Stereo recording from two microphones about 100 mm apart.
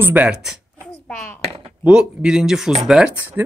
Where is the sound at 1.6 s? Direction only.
10° right (ahead or behind).